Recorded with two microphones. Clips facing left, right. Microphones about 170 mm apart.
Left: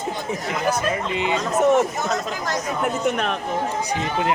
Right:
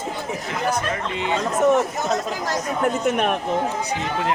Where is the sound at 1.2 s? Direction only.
10° left (ahead or behind).